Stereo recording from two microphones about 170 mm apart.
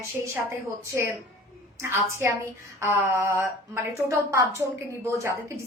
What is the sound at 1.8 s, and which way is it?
Speech, 15° right (ahead or behind).